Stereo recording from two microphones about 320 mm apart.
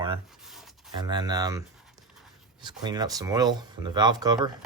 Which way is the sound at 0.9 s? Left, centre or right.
Centre.